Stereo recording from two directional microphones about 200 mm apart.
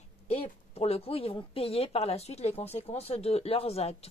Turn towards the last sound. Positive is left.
turn(degrees=30)  # may be behind; listen again after turning